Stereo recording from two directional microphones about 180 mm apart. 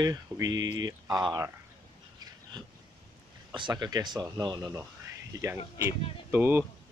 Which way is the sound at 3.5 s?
25° right (ahead or behind).